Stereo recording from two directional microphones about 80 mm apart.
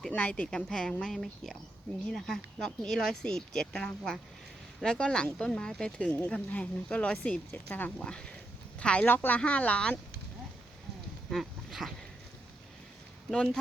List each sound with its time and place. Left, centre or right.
0.1 s speech: centre
11.3 s speech: centre
13.3 s speech: centre